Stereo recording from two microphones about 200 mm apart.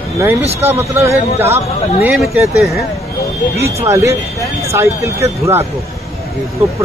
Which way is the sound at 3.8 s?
15° right (ahead or behind).